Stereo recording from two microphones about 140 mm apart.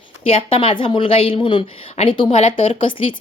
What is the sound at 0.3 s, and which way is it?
A woman's voice, 40° left (ahead or behind).